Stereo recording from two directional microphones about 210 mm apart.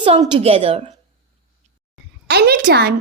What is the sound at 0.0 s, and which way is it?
Speech, 25° right (ahead or behind).